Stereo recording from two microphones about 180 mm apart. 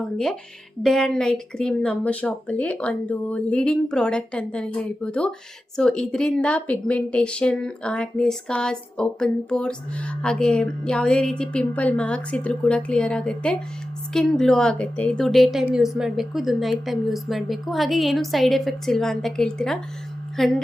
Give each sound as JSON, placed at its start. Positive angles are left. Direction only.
{"t": 0.0, "sound": "speech", "side_deg": 0}